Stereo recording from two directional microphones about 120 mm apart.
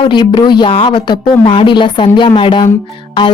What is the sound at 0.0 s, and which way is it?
Speech, 40° left (ahead or behind).